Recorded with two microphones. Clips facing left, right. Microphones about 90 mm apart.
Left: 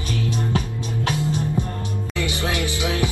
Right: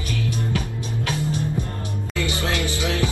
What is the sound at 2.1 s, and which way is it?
Music, 20° left (ahead or behind).